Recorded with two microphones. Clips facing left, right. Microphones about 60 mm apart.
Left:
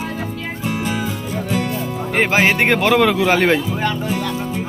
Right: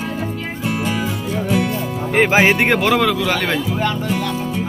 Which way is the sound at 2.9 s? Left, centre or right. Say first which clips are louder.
Left 3 dB; centre.